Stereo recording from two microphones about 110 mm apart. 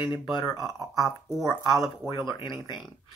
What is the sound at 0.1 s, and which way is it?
Speech, 45° left (ahead or behind).